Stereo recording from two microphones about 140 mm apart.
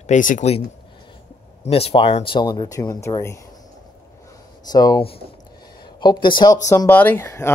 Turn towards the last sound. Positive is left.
turn(degrees=20)  # may be behind; listen again after turning